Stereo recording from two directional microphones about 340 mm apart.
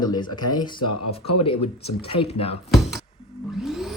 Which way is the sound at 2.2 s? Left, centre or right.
Left.